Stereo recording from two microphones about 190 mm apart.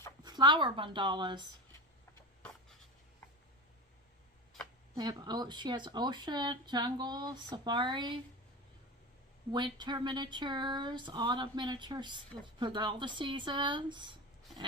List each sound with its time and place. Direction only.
0.2 s speech: 20° right (ahead or behind)
4.9 s speech: 20° right (ahead or behind)
9.5 s speech: 25° right (ahead or behind)